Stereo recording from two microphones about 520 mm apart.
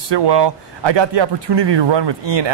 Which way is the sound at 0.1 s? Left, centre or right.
Right.